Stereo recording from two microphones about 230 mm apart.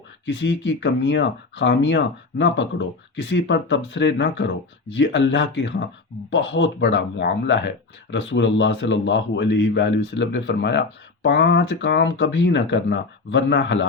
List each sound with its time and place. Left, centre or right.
0.3 s a man's voice: left